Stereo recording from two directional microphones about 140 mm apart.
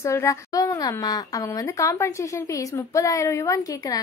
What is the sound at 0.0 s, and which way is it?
A woman's voice, 20° left (ahead or behind).